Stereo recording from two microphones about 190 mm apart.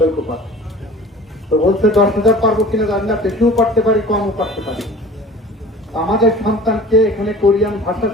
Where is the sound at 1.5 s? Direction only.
Centre (ahead or behind).